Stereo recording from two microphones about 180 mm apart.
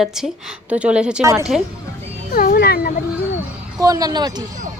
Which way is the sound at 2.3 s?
50° left (ahead or behind).